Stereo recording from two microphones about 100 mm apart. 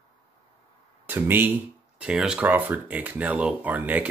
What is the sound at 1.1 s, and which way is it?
Speech, 20° right (ahead or behind).